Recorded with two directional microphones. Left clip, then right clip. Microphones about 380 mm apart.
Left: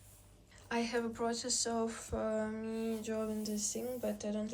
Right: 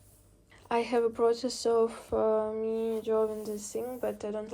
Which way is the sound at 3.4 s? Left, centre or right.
Centre.